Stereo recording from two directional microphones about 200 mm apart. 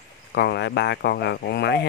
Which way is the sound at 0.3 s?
55° left (ahead or behind).